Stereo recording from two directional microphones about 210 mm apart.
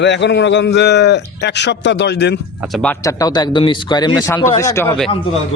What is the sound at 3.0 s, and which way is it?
Speech, 15° left (ahead or behind).